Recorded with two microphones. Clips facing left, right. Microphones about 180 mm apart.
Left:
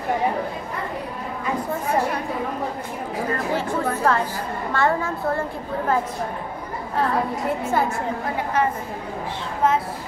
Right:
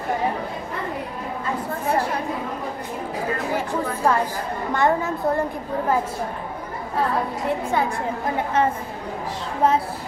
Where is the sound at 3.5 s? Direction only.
15° right (ahead or behind).